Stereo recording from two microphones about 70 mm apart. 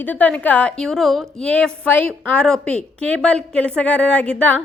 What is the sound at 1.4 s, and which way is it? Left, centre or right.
A woman's voice, centre.